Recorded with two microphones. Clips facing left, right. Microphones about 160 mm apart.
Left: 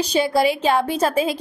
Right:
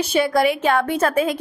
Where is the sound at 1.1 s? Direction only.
30° left (ahead or behind).